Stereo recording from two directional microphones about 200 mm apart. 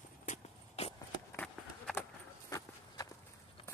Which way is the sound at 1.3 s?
5° left (ahead or behind).